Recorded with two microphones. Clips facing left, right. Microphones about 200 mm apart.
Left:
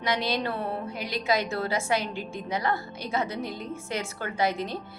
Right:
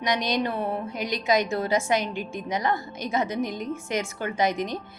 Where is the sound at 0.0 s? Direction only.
20° right (ahead or behind).